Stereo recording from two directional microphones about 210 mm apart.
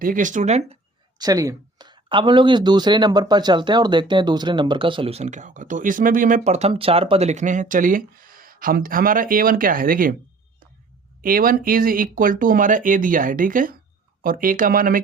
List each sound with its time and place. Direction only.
0.0 s speech: 40° right (ahead or behind)
1.2 s speech: 15° right (ahead or behind); by 10.2 s 40° right (ahead or behind)
11.2 s speech: 40° right (ahead or behind)